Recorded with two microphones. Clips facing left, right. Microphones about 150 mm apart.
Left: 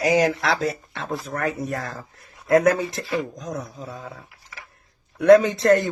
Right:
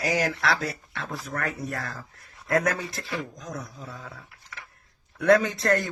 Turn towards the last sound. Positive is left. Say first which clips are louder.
# left 7 dB
turn(degrees=20)  # may be behind; listen again after turning